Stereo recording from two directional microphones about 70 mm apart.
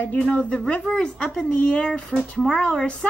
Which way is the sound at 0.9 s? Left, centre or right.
Centre.